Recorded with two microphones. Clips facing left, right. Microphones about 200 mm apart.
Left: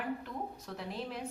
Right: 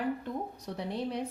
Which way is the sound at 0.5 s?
35° right (ahead or behind).